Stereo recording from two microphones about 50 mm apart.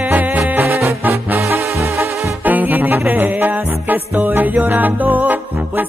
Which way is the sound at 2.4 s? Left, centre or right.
Right.